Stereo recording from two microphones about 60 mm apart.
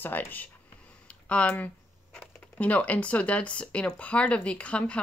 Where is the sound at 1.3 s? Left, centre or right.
Left.